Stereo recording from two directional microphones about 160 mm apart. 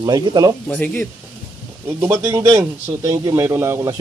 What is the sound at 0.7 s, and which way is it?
Speech, 10° left (ahead or behind).